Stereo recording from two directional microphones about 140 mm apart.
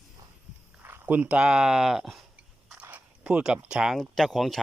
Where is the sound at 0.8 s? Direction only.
15° right (ahead or behind).